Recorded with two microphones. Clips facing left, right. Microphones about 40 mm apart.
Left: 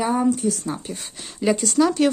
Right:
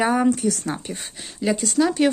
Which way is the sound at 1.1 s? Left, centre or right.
Centre.